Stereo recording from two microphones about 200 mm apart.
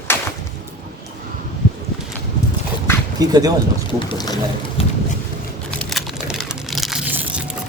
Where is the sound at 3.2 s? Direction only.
20° right (ahead or behind).